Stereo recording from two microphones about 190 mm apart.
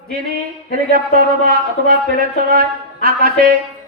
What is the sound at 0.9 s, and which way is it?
Speech, 50° right (ahead or behind).